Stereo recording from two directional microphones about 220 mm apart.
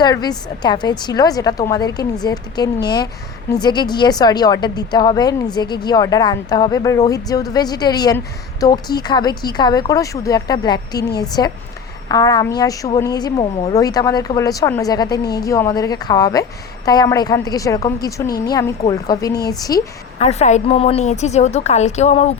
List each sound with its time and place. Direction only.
0.0 s a woman's voice: 20° left (ahead or behind)
20.1 s a woman's voice: 30° left (ahead or behind)